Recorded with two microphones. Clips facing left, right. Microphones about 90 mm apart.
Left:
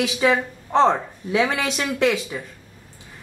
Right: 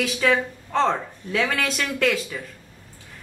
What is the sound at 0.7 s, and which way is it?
Speech, 20° left (ahead or behind).